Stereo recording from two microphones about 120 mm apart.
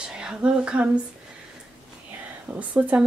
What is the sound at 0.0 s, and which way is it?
Speech, 10° right (ahead or behind).